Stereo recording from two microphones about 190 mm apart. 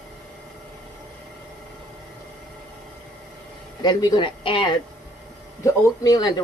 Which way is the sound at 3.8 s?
20° left (ahead or behind).